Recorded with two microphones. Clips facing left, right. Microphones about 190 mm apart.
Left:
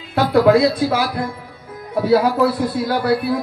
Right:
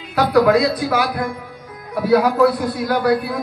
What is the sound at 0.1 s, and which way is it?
A man's voice, 25° left (ahead or behind).